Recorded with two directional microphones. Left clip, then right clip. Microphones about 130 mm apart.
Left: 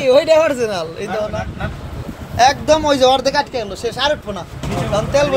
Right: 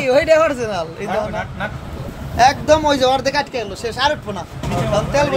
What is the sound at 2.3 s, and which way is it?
Speech, 15° left (ahead or behind).